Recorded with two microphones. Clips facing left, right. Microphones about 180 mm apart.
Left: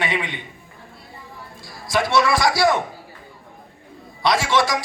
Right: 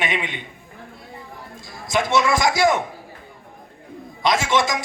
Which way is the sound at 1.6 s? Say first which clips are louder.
Left 1 dB; 20° right (ahead or behind).